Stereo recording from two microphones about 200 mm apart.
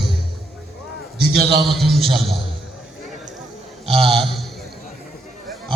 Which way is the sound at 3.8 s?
30° right (ahead or behind).